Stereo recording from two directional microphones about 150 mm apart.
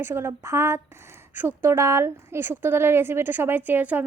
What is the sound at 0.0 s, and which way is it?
A woman's voice, 15° right (ahead or behind).